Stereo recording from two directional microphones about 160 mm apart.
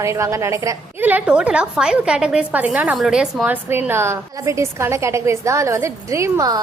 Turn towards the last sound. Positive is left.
turn(degrees=-25)  # may be behind; listen again after turning